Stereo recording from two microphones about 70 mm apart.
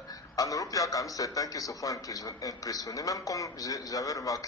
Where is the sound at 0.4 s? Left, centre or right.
Left.